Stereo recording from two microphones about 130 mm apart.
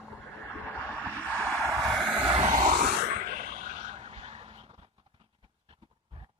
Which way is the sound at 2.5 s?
90° right.